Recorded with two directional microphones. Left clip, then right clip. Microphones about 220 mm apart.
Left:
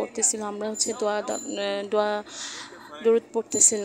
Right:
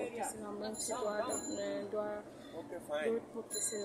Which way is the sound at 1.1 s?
35° left (ahead or behind).